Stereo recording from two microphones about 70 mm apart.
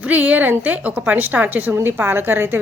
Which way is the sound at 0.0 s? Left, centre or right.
Right.